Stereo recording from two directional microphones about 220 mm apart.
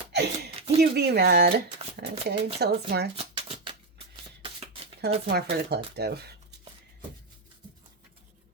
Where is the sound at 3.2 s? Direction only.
25° right (ahead or behind).